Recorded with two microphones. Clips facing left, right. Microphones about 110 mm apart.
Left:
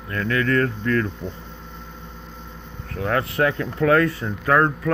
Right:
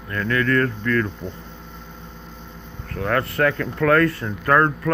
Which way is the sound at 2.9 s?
55° right (ahead or behind).